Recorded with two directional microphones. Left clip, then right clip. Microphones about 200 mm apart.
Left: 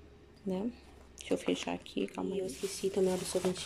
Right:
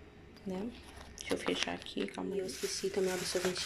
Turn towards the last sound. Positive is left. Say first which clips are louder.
# left 2 dB
turn(degrees=15)  # may be behind; listen again after turning